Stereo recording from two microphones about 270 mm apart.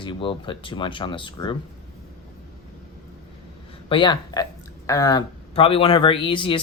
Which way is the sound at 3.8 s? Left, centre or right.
Centre.